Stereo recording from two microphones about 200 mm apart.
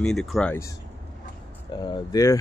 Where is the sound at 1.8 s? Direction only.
20° left (ahead or behind).